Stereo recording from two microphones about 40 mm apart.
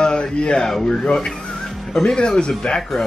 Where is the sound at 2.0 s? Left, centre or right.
Centre.